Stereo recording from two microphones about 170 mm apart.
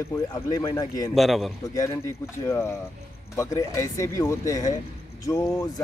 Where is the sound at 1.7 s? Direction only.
20° left (ahead or behind).